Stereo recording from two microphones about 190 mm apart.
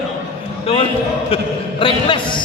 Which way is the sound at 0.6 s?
30° left (ahead or behind).